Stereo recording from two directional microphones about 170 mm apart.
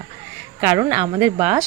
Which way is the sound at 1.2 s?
10° right (ahead or behind).